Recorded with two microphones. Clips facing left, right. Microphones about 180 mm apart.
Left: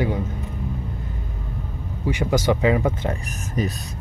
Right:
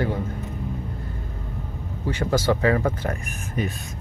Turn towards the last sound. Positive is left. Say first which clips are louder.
# left 2 dB
turn(degrees=40)  # may be behind; listen again after turning